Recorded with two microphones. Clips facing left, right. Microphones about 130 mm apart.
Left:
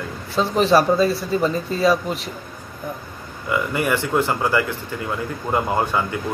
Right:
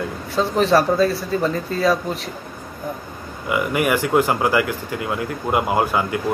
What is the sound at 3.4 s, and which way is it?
Speech, 15° right (ahead or behind).